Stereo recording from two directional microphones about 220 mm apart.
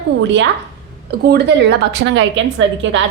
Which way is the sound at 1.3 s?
50° right (ahead or behind).